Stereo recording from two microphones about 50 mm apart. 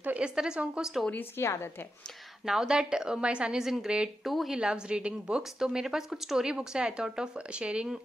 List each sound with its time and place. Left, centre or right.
0.2 s speech: centre
1.4 s a woman's voice: left
2.4 s speech: centre
3.6 s speech: centre
4.2 s speech: centre
4.6 s a woman's voice: centre